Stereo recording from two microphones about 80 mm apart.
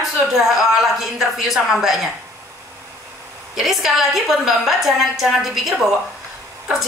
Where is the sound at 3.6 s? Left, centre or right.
Centre.